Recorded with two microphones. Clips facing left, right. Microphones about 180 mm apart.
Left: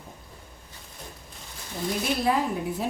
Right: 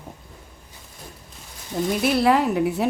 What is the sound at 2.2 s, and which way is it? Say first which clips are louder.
Speech: right 6 dB; 70° right (ahead or behind).